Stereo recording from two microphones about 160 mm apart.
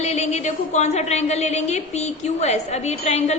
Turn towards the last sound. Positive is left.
turn(degrees=45)  # may be behind; listen again after turning